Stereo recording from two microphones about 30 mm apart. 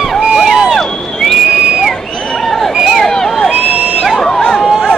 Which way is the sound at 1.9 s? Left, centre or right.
Left.